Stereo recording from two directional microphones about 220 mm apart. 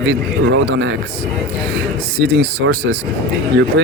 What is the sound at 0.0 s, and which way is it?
Speech, 55° right (ahead or behind).